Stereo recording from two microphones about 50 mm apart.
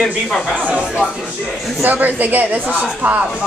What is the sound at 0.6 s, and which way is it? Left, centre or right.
Speech, centre.